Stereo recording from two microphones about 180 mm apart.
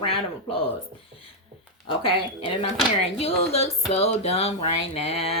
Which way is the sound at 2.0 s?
30° left (ahead or behind).